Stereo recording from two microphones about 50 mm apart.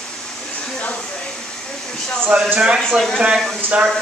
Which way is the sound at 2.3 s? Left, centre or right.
Right.